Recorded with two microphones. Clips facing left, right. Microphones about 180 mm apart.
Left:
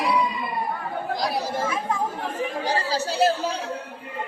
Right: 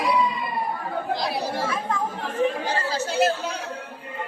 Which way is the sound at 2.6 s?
35° left (ahead or behind).